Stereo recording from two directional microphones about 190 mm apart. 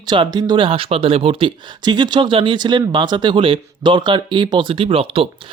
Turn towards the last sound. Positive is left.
turn(degrees=-30)  # may be behind; listen again after turning